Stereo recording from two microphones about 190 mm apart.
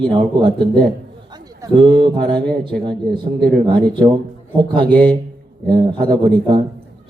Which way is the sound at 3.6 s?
25° right (ahead or behind).